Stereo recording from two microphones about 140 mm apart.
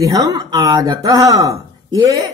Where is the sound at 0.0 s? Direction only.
25° right (ahead or behind).